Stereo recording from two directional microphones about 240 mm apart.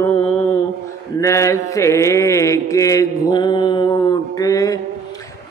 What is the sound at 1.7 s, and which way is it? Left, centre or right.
Mantra, centre.